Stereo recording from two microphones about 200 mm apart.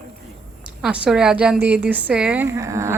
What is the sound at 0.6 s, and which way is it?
A woman's voice, 5° right (ahead or behind).